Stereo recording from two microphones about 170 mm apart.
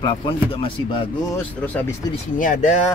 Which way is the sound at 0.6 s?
30° left (ahead or behind).